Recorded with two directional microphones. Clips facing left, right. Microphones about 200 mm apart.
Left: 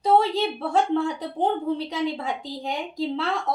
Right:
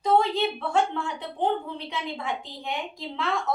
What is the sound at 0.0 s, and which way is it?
A woman's voice, 35° left (ahead or behind).